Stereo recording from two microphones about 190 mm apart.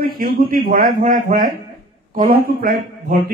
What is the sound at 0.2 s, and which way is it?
Speech, 50° right (ahead or behind).